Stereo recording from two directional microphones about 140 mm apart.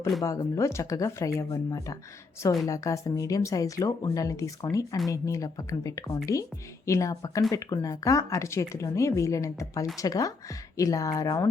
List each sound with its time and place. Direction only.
0.2 s speech: 25° left (ahead or behind)